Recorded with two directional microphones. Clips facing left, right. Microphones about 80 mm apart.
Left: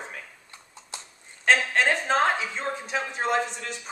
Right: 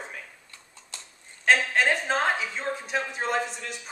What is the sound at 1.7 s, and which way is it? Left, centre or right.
Speech, centre.